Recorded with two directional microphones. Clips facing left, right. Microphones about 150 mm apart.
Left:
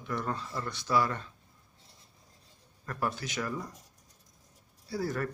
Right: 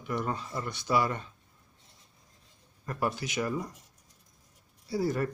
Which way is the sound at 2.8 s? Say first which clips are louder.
Right 2 dB; 15° right (ahead or behind).